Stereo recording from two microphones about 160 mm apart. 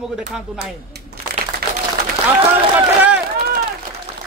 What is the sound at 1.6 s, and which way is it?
Applause, 75° right (ahead or behind).